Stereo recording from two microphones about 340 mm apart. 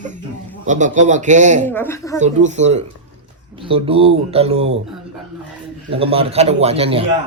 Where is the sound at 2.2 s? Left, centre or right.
Right.